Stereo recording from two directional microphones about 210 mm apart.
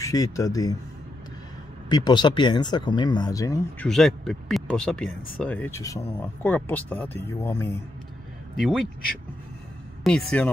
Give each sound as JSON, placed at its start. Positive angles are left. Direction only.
{"t": 0.0, "sound": "speech", "side_deg": 15}
{"t": 1.9, "sound": "speech", "side_deg": 20}
{"t": 3.9, "sound": "speech", "side_deg": 0}
{"t": 8.5, "sound": "speech", "side_deg": 0}
{"t": 10.0, "sound": "speech", "side_deg": 5}